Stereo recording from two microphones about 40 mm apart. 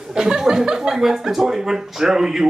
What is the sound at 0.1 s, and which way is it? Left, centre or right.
Speech, centre.